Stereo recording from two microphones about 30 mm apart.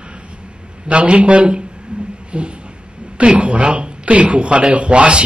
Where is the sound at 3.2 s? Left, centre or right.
Right.